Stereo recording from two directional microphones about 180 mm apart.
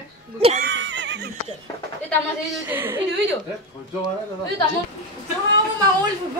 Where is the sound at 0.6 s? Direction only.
90° right.